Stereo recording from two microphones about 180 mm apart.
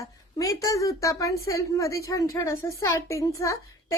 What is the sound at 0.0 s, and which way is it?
A woman's voice, 20° left (ahead or behind).